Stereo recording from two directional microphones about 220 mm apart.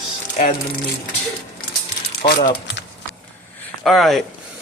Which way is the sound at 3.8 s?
Centre (ahead or behind).